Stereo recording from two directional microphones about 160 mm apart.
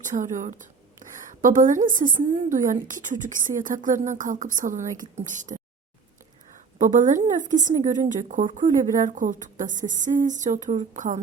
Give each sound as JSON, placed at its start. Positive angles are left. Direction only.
{"t": 0.1, "sound": "a woman's voice", "side_deg": -50}
{"t": 6.7, "sound": "a woman's voice", "side_deg": -50}